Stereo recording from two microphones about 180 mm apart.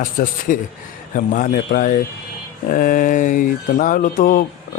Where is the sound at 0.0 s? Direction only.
50° left (ahead or behind).